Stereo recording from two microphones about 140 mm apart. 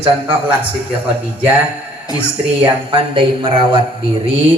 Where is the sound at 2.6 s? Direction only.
35° right (ahead or behind).